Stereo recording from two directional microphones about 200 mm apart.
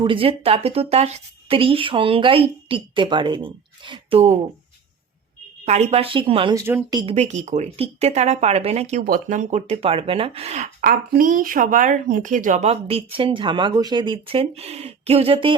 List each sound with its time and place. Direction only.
0.0 s speech: 25° right (ahead or behind)
5.6 s speech: 35° right (ahead or behind); by 7.0 s 15° right (ahead or behind)
7.0 s speech: 30° right (ahead or behind)